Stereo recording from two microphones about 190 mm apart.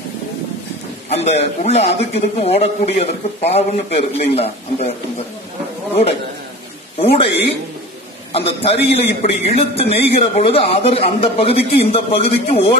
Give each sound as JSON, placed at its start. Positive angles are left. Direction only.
{"t": 1.1, "sound": "a man's voice", "side_deg": 35}
{"t": 7.0, "sound": "a man's voice", "side_deg": 30}
{"t": 8.3, "sound": "a man's voice", "side_deg": 30}